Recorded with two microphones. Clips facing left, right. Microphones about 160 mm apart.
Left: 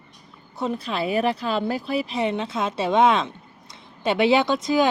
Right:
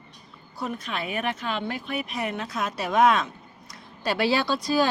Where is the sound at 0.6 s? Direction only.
30° left (ahead or behind).